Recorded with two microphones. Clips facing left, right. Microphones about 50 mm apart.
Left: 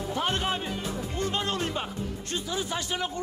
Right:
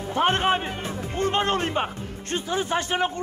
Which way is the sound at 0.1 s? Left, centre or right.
Right.